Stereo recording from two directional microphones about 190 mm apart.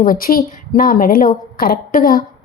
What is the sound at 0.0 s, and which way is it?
A woman's voice, 50° left (ahead or behind).